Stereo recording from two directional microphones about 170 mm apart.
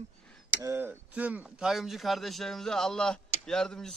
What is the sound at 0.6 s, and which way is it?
Speech, 10° right (ahead or behind).